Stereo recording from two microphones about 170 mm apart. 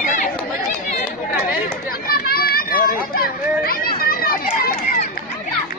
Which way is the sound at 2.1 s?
60° left (ahead or behind).